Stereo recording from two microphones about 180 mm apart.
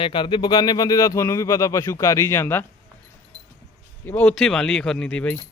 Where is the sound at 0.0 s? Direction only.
30° left (ahead or behind); by 2.6 s 10° left (ahead or behind).